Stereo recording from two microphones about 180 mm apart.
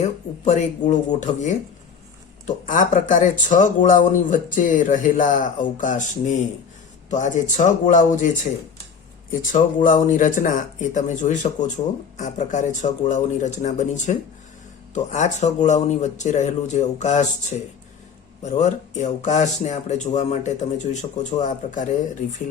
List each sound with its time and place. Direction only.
0.0 s speech: 40° left (ahead or behind)
2.6 s speech: 45° left (ahead or behind)
9.4 s speech: 45° left (ahead or behind)
18.4 s speech: 40° left (ahead or behind)